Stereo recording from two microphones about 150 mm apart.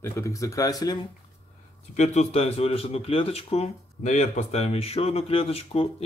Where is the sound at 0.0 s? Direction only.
20° left (ahead or behind).